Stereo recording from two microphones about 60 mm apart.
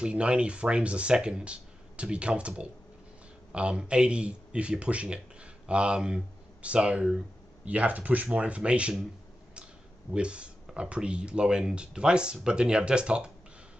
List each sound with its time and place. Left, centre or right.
0.0 s speech: centre
10.1 s speech: centre